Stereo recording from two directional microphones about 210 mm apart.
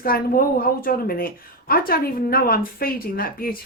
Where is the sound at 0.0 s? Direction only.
45° left (ahead or behind).